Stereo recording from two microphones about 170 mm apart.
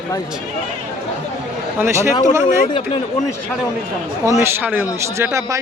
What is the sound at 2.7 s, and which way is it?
Speech, 30° left (ahead or behind).